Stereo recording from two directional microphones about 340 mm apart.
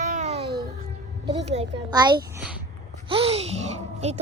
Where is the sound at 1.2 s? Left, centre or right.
Centre.